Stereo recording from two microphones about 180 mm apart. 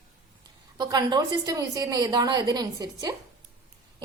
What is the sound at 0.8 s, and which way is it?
A woman's voice, 20° right (ahead or behind).